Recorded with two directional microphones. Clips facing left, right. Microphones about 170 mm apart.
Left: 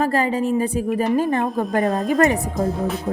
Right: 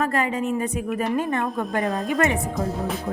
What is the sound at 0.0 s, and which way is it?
A woman's voice, 30° left (ahead or behind).